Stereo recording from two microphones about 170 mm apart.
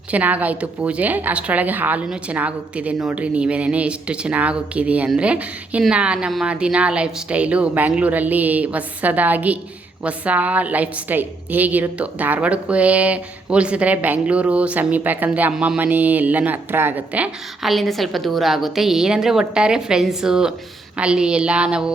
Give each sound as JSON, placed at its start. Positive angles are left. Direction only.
{"t": 0.1, "sound": "a woman's voice", "side_deg": -10}
{"t": 17.6, "sound": "a woman's voice", "side_deg": 0}